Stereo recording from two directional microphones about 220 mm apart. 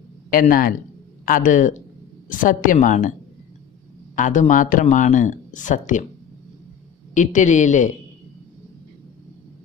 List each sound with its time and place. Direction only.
0.3 s speech: 40° left (ahead or behind)
4.1 s speech: 35° left (ahead or behind)
7.2 s speech: 35° left (ahead or behind)